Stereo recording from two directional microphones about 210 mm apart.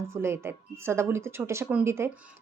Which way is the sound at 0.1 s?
10° right (ahead or behind).